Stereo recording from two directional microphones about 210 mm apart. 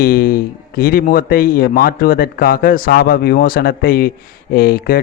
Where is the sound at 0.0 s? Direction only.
45° left (ahead or behind).